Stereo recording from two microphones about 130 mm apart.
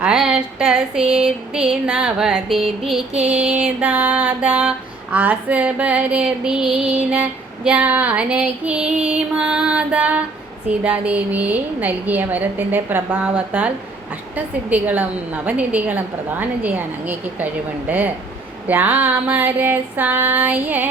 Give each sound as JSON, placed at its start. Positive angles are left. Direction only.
{"t": 0.0, "sound": "female singing", "side_deg": -5}